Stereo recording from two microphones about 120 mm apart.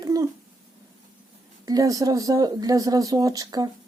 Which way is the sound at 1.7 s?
30° right (ahead or behind).